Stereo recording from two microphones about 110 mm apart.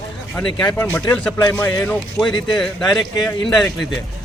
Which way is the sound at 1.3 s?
30° left (ahead or behind).